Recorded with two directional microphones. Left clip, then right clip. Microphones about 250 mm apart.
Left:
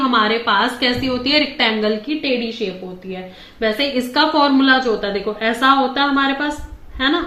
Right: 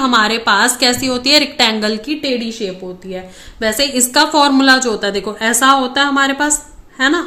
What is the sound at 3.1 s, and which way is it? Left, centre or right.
A woman's voice, right.